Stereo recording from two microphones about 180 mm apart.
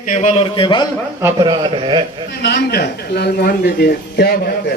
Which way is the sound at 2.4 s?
60° left (ahead or behind).